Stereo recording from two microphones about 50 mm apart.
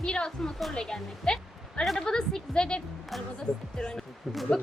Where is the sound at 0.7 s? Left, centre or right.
Centre.